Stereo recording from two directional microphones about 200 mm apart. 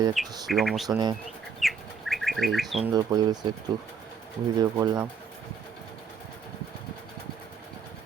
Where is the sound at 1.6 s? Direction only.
Centre (ahead or behind).